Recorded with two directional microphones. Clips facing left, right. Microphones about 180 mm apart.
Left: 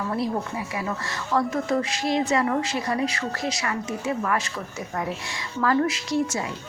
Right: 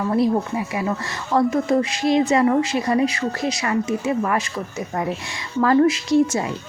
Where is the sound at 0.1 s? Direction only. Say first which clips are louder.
Right 10 dB; 20° right (ahead or behind).